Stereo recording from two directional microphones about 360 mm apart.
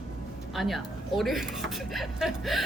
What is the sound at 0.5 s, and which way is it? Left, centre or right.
Speech, centre.